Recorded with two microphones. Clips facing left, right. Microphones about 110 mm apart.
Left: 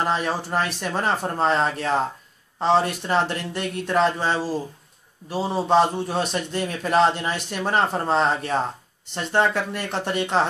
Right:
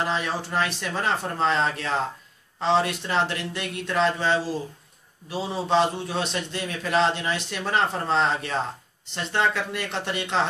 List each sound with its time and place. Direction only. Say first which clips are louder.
0.0 s a man's voice: left 3 dB; 45° left (ahead or behind)